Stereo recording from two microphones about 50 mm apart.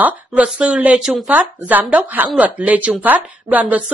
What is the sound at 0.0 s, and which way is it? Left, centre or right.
A woman's voice, right.